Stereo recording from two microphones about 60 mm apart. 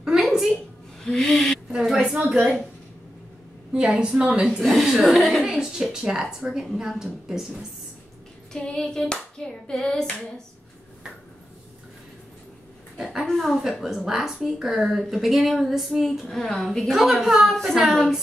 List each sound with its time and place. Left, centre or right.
0.2 s a sound: centre
1.0 s owl: centre
1.7 s a sound: centre
3.7 s a woman's voice: centre
4.5 s a woman's voice: centre
8.5 s hands: centre
13.3 s a woman's voice: centre